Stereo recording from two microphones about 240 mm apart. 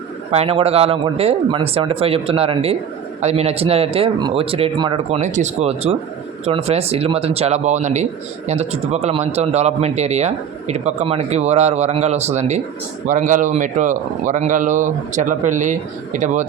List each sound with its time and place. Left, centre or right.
0.3 s speech: right